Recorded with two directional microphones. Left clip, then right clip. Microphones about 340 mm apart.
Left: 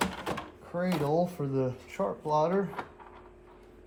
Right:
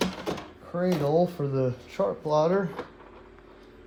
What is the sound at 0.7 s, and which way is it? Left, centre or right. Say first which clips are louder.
Speech: right 4 dB; right.